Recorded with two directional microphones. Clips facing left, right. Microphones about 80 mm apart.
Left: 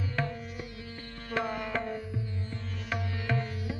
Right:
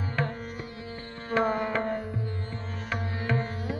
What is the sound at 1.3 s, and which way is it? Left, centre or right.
Music, right.